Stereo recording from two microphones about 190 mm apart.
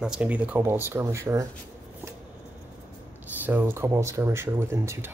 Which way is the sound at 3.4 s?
10° right (ahead or behind).